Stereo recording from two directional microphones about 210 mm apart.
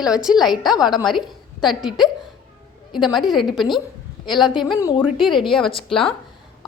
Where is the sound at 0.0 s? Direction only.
5° right (ahead or behind).